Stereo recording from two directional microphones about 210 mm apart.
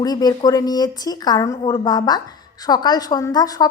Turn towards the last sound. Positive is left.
turn(degrees=20)  # may be behind; listen again after turning